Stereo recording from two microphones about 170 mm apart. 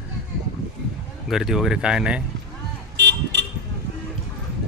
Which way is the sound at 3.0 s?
90° right.